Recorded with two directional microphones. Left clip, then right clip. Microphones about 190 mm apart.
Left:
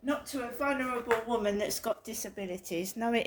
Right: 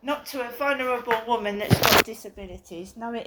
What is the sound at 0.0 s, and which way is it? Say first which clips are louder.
Speech: right 5 dB; 30° left (ahead or behind).